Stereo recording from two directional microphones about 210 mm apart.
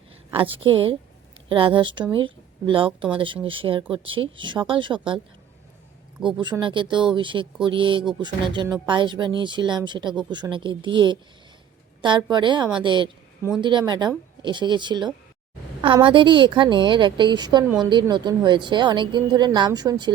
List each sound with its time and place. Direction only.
0.3 s a woman's voice: 25° right (ahead or behind)
6.4 s speech: 20° right (ahead or behind)